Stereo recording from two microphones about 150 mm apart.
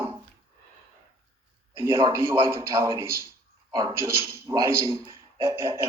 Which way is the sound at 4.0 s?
15° right (ahead or behind).